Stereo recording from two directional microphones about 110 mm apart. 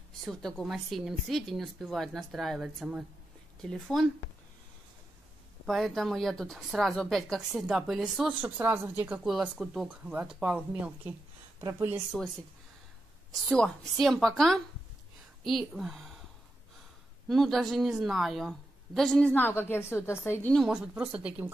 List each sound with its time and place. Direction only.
0.2 s speech: 5° left (ahead or behind)
5.7 s speech: centre (ahead or behind); by 9.2 s 20° right (ahead or behind)
9.2 s speech: 5° right (ahead or behind)
12.1 s speech: 5° right (ahead or behind)
13.5 s speech: centre (ahead or behind)
17.3 s a woman's voice: centre (ahead or behind); by 20.5 s 25° left (ahead or behind)
20.7 s speech: 15° right (ahead or behind)